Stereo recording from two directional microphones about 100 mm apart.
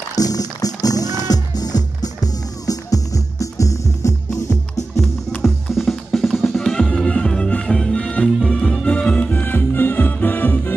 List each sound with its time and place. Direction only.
0.1 s music: 40° left (ahead or behind)
5.4 s music: 5° left (ahead or behind)